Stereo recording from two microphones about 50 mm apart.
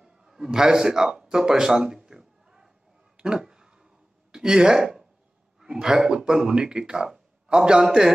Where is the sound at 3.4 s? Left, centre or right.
Centre.